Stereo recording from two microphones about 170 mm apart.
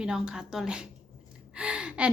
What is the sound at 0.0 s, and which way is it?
A woman's voice, 5° right (ahead or behind).